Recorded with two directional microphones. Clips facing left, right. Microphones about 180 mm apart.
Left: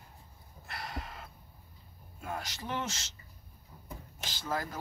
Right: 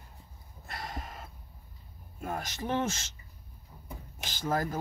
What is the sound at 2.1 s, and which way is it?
Speech, 50° right (ahead or behind).